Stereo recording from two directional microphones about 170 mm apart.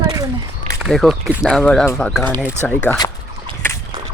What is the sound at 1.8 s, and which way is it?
Speech, 15° left (ahead or behind).